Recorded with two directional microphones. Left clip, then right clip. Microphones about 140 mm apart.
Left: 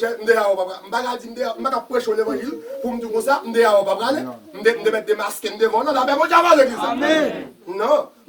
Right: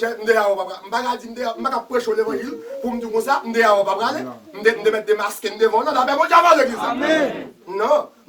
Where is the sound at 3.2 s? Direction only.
30° right (ahead or behind).